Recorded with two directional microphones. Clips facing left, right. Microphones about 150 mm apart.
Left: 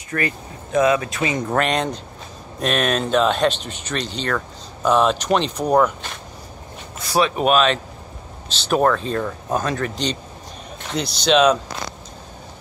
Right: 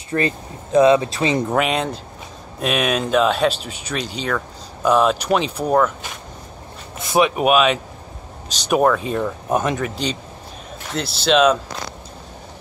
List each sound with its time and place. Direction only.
0.1 s speech: 15° right (ahead or behind)
1.5 s speech: 5° right (ahead or behind)
7.0 s speech: 20° right (ahead or behind)
9.8 s speech: 5° right (ahead or behind)